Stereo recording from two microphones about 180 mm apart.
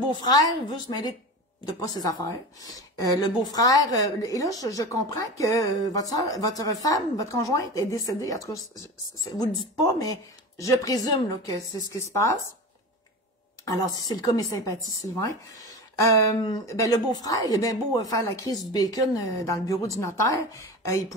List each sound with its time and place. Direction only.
0.2 s a woman's voice: 20° left (ahead or behind)
13.7 s a woman's voice: 20° left (ahead or behind)